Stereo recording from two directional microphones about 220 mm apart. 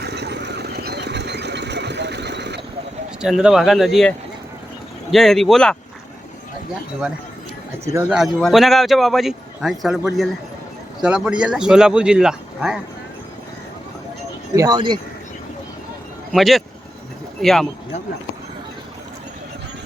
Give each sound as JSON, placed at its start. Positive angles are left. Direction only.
{"t": 0.0, "sound": "engine", "side_deg": -50}
{"t": 3.2, "sound": "speech", "side_deg": -5}
{"t": 5.1, "sound": "speech", "side_deg": 0}
{"t": 8.1, "sound": "speech", "side_deg": 0}
{"t": 11.0, "sound": "speech", "side_deg": -5}
{"t": 14.5, "sound": "speech", "side_deg": -15}
{"t": 16.3, "sound": "speech", "side_deg": 0}